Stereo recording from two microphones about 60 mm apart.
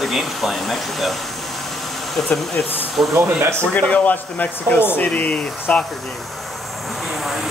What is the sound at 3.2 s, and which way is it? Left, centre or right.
Speech, right.